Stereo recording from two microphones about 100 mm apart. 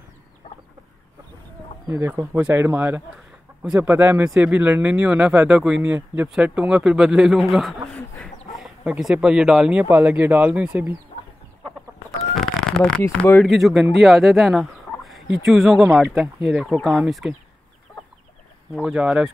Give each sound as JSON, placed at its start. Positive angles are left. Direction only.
{"t": 1.9, "sound": "speech", "side_deg": -25}
{"t": 8.5, "sound": "chicken", "side_deg": -5}
{"t": 9.0, "sound": "speech", "side_deg": -10}
{"t": 12.4, "sound": "chicken", "side_deg": 5}
{"t": 13.1, "sound": "speech", "side_deg": 10}
{"t": 13.6, "sound": "speech", "side_deg": -5}
{"t": 13.9, "sound": "fowl", "side_deg": 0}
{"t": 16.5, "sound": "speech", "side_deg": 0}
{"t": 18.8, "sound": "speech", "side_deg": -10}